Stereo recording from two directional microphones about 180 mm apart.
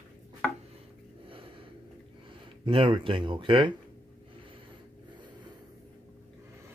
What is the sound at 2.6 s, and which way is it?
Speech, 30° right (ahead or behind).